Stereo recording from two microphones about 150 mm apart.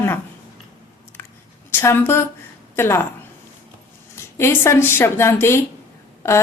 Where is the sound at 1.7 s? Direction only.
15° left (ahead or behind).